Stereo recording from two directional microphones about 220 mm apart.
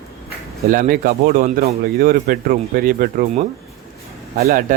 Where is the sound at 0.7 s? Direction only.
40° right (ahead or behind).